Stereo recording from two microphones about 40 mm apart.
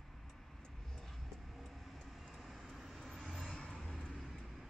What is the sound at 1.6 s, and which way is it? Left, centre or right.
Vehicle, centre.